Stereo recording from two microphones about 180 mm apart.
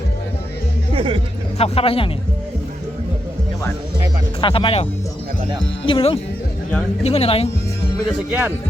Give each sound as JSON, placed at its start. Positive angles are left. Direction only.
{"t": 0.9, "sound": "music", "side_deg": -30}
{"t": 1.5, "sound": "speech", "side_deg": 35}
{"t": 4.4, "sound": "speech", "side_deg": 30}
{"t": 8.3, "sound": "speech", "side_deg": -10}